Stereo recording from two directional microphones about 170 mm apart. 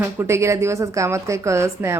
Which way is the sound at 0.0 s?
15° right (ahead or behind).